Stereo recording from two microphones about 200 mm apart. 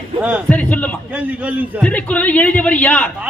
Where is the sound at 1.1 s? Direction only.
5° right (ahead or behind).